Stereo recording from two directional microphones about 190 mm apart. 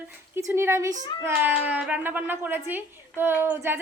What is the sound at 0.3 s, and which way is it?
A woman's voice, 15° right (ahead or behind).